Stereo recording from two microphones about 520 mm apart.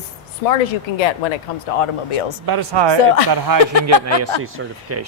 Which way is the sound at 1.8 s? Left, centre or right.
Left.